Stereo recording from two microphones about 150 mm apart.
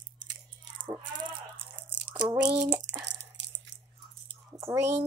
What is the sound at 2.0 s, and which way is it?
Crumpling, 30° right (ahead or behind).